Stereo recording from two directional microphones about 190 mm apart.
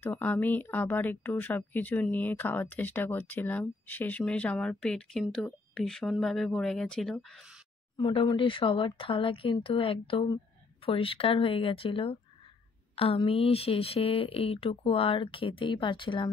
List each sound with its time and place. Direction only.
0.0 s speech: 10° left (ahead or behind)
8.0 s speech: 30° left (ahead or behind)